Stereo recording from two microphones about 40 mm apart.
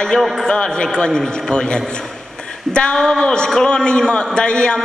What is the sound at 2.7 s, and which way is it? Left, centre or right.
A man's voice, centre.